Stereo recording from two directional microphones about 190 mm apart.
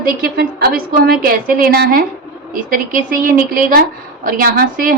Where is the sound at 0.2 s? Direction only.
50° right (ahead or behind).